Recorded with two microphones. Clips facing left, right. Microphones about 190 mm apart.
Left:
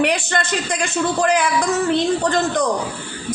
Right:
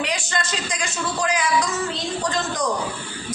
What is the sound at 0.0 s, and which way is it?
A man's voice, 60° left (ahead or behind).